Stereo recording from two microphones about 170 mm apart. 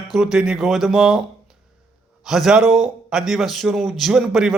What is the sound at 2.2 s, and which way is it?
A man's voice, 5° right (ahead or behind).